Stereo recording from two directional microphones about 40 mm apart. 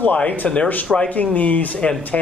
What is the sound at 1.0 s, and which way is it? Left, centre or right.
Speech, left.